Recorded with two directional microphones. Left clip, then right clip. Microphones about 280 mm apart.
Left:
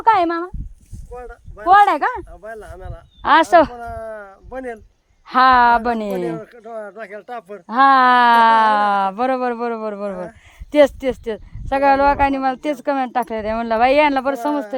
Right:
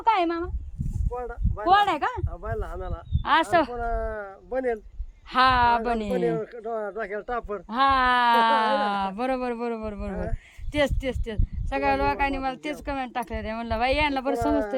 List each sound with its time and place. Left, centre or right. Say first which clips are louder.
0.0 s a sound: left 8 dB; centre
1.1 s speech: right 1 dB; centre
1.7 s speech: left 9 dB; centre
2.4 s speech: even; centre
3.2 s speech: left 9 dB; centre
3.8 s speech: even; centre
5.3 s speech: left 8 dB; centre
6.3 s speech: even; centre
7.8 s speech: left 9 dB; centre